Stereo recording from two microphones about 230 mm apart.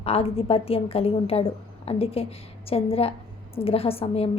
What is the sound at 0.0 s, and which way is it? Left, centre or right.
A woman's voice, left.